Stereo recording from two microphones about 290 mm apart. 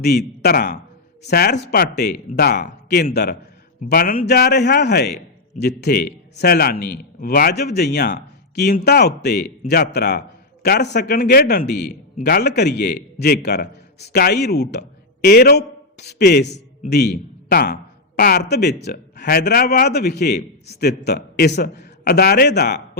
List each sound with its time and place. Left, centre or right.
0.0 s a man's voice: left